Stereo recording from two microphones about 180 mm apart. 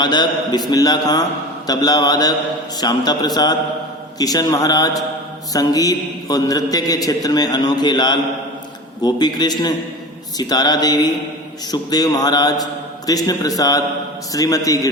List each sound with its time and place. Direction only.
0.0 s a man's voice: 25° left (ahead or behind)